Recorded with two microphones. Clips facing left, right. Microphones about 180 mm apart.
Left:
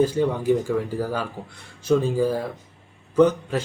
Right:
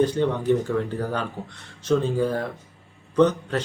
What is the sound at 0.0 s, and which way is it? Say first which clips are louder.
A man's voice: left 1 dB; 5° left (ahead or behind).